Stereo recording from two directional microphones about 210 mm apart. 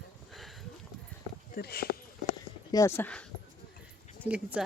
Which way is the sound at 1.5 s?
45° left (ahead or behind).